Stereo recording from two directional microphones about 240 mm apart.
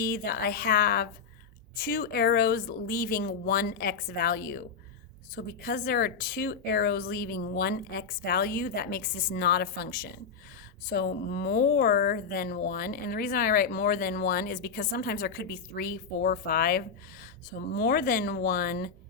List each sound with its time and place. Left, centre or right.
0.0 s speech: left